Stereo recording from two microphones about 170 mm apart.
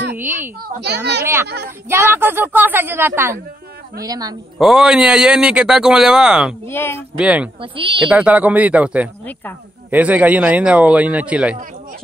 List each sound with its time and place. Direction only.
0.1 s a child's voice: 10° right (ahead or behind)
0.7 s a child's voice: 80° right
1.2 s a woman's voice: 15° right (ahead or behind)
4.6 s a man's voice: centre (ahead or behind)
6.7 s speech: 15° left (ahead or behind)
7.2 s speech: 5° right (ahead or behind)
7.7 s a woman's voice: 30° right (ahead or behind)
8.1 s speech: 10° right (ahead or behind)